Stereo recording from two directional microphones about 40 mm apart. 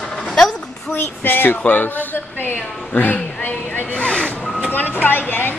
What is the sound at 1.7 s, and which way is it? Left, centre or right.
Speech, left.